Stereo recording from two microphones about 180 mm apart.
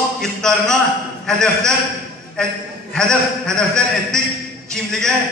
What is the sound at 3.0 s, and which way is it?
A man's voice, 5° left (ahead or behind).